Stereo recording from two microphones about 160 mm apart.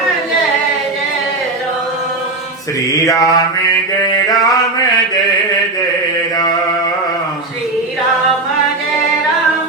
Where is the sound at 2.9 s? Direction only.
20° left (ahead or behind).